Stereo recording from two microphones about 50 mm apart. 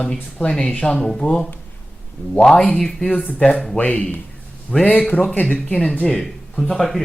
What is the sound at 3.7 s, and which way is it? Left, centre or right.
Speech, left.